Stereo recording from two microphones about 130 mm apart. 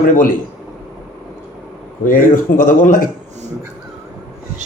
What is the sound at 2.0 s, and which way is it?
Speech, 90° left.